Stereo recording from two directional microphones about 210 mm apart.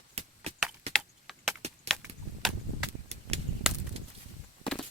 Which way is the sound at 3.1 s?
30° right (ahead or behind).